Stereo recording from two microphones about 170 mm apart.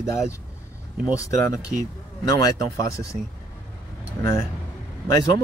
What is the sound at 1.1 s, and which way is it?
Speech, 20° left (ahead or behind).